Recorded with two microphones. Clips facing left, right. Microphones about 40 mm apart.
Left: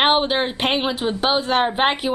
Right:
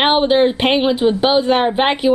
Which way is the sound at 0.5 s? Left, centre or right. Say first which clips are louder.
Right 6 dB; centre.